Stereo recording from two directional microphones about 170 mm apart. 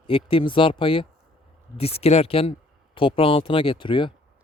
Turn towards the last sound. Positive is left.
turn(degrees=30)  # may be behind; listen again after turning